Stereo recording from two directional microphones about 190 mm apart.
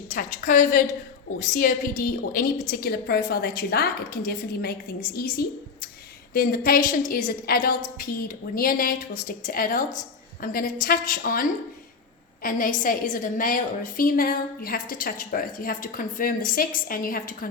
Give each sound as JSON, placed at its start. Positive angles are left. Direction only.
{"t": 0.1, "sound": "a woman's voice", "side_deg": 40}